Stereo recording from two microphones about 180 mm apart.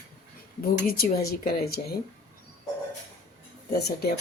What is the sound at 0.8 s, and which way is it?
A woman's voice, 55° left (ahead or behind).